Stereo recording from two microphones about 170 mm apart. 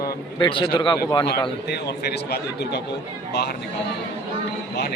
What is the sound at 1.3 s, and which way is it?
A man's voice, 70° left (ahead or behind).